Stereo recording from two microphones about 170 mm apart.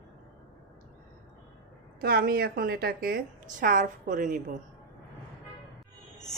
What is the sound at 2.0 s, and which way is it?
A woman's voice, 65° right (ahead or behind).